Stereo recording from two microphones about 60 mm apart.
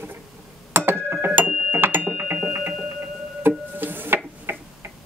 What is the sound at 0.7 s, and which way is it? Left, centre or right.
Chink, right.